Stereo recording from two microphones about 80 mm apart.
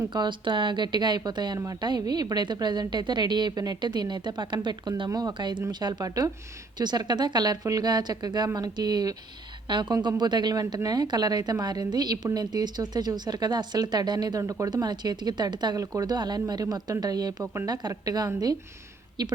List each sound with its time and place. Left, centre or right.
0.1 s a woman's voice: right
15.8 s a woman's voice: right
16.0 s a woman's voice: right